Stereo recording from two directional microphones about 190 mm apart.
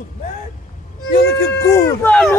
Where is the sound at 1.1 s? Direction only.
60° left (ahead or behind).